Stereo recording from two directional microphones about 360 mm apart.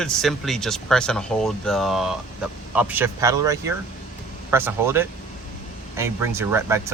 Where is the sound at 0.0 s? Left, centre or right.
Centre.